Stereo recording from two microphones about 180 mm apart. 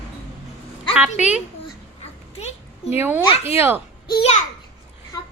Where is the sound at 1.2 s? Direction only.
5° right (ahead or behind).